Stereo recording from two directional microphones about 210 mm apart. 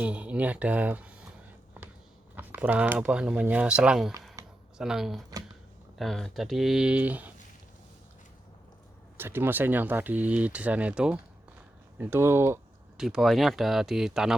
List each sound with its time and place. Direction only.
0.0 s speech: 5° right (ahead or behind)
2.3 s speech: 10° right (ahead or behind)
4.4 s a sound: 15° right (ahead or behind)
4.8 s speech: centre (ahead or behind)
9.1 s speech: 10° right (ahead or behind)